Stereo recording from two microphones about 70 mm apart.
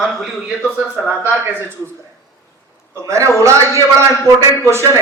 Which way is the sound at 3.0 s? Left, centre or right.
Right.